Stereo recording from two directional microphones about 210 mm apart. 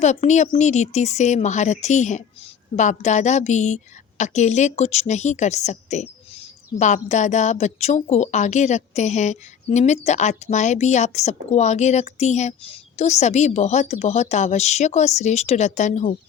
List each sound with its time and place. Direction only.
0.0 s a woman's voice: 35° left (ahead or behind)